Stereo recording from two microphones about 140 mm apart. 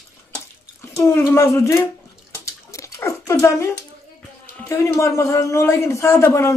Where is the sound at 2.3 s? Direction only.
20° left (ahead or behind).